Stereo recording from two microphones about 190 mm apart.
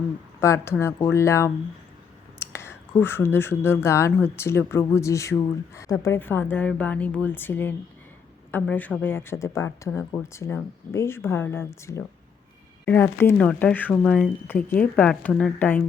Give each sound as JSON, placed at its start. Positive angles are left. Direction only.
{"t": 0.3, "sound": "speech", "side_deg": 15}